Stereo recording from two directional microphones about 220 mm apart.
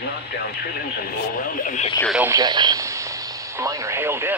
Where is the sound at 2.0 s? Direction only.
5° right (ahead or behind).